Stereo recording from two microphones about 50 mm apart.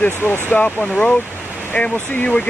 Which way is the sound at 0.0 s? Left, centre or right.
Left.